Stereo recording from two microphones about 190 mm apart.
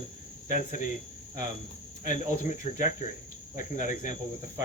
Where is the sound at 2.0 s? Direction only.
40° left (ahead or behind).